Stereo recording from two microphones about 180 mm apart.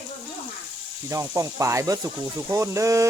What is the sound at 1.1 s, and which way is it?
Speech, 15° right (ahead or behind).